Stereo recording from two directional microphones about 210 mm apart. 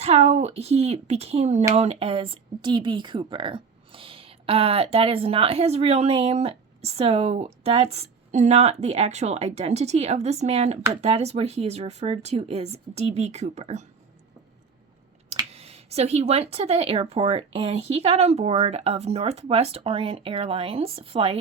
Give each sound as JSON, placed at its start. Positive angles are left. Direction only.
{"t": 0.0, "sound": "speech", "side_deg": -30}
{"t": 15.4, "sound": "speech", "side_deg": -30}